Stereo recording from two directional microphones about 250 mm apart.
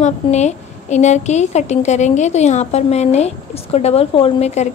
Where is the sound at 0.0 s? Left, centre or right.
Left.